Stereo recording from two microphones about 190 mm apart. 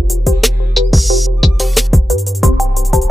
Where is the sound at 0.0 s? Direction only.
Centre (ahead or behind).